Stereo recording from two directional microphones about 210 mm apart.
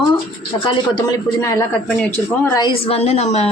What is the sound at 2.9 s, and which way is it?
Speech, 30° left (ahead or behind).